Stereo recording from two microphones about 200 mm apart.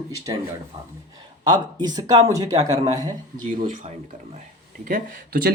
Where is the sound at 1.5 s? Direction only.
20° right (ahead or behind).